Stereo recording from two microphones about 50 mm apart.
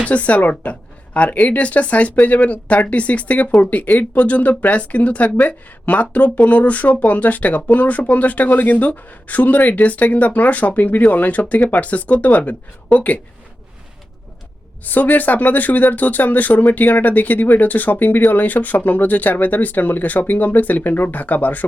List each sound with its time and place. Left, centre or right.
0.0 s speech: left
14.8 s speech: left